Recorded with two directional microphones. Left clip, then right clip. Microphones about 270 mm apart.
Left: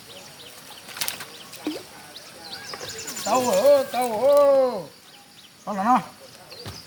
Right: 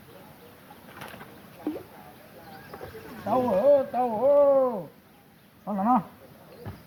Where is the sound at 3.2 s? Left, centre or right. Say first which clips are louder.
Left 3 dB; left.